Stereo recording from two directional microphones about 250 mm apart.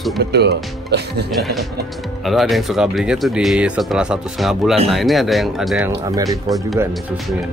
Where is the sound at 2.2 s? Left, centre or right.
Centre.